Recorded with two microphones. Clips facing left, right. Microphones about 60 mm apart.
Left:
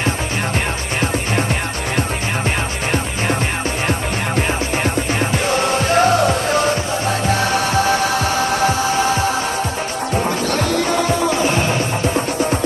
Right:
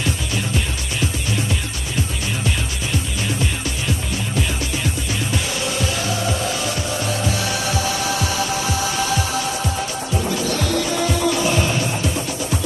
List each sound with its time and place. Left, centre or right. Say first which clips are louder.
4.4 s music: left 5 dB; left